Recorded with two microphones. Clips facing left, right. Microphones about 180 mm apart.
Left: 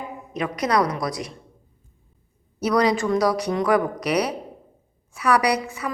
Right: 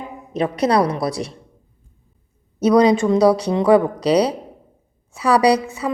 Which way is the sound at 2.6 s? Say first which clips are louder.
Right 6 dB; 20° right (ahead or behind).